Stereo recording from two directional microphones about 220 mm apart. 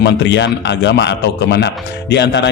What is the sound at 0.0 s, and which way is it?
A man's voice, 55° left (ahead or behind).